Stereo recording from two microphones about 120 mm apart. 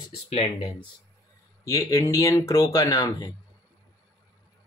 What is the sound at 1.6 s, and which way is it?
Speech, 25° left (ahead or behind).